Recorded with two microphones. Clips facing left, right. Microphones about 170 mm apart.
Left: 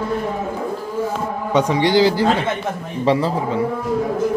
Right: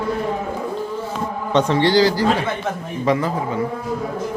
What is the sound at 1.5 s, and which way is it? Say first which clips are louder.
A man's voice: even; 10° left (ahead or behind).